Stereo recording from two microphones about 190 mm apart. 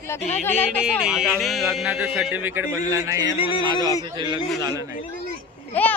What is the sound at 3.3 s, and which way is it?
Speech, 25° left (ahead or behind).